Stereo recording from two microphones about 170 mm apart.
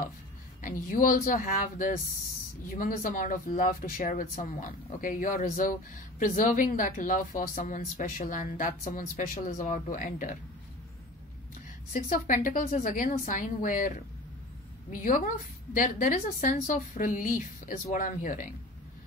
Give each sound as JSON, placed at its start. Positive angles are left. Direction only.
{"t": 0.6, "sound": "speech", "side_deg": 50}
{"t": 11.9, "sound": "speech", "side_deg": 50}